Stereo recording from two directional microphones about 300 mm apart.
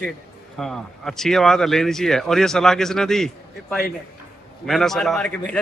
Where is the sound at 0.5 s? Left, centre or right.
Centre.